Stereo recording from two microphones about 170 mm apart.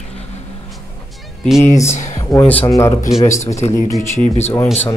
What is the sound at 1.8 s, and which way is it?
Speech, 15° left (ahead or behind).